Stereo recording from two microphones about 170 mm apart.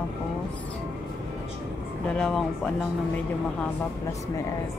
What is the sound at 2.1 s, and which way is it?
Speech, 5° left (ahead or behind).